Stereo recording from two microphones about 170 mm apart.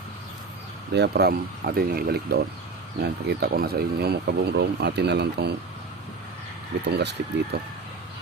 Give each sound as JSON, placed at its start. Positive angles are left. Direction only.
{"t": 0.9, "sound": "speech", "side_deg": -75}
{"t": 6.8, "sound": "speech", "side_deg": -85}